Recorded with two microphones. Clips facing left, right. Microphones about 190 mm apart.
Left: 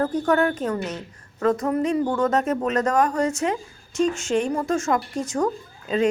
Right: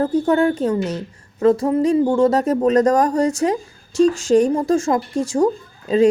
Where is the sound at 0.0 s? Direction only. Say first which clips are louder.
Right 4 dB; 30° right (ahead or behind).